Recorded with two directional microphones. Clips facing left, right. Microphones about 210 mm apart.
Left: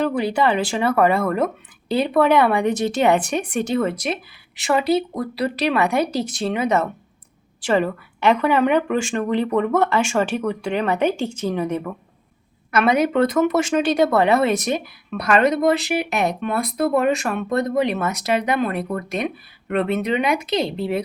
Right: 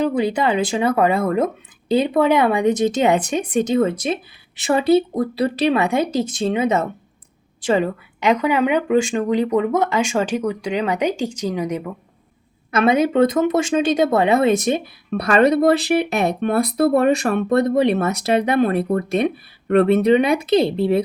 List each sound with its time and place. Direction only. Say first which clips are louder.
0.0 s speech: right 1 dB; 20° right (ahead or behind)
12.7 s speech: right 2 dB; 25° right (ahead or behind)
15.1 s speech: right 3 dB; 35° right (ahead or behind)